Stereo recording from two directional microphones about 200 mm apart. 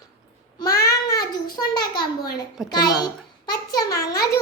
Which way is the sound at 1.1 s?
20° left (ahead or behind).